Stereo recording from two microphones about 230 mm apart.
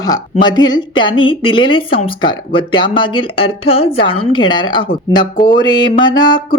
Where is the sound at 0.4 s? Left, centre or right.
Centre.